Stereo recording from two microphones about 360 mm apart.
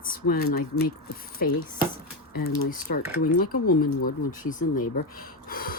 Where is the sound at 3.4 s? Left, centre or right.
Left.